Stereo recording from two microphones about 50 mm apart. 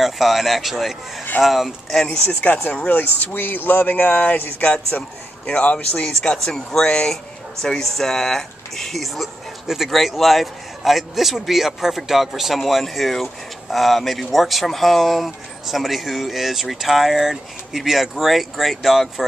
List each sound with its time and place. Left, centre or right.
0.0 s speech: centre
3.2 s speech: left; by 19.2 s centre